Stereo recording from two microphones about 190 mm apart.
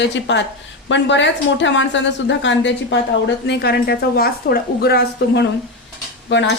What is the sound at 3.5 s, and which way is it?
A woman's voice, 60° left (ahead or behind).